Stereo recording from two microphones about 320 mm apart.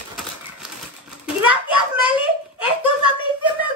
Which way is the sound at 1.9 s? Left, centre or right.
Centre.